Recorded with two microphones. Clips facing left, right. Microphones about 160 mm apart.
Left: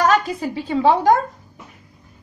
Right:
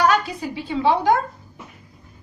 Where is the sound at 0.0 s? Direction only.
45° left (ahead or behind).